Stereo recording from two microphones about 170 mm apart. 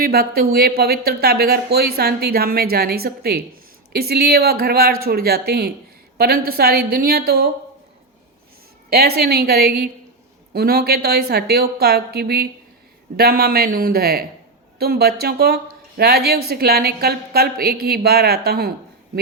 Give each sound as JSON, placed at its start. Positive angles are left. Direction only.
{"t": 0.0, "sound": "a woman's voice", "side_deg": -65}
{"t": 8.9, "sound": "a woman's voice", "side_deg": -65}